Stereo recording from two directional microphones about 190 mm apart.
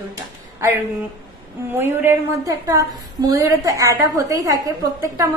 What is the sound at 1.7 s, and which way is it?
A woman's voice, 10° right (ahead or behind).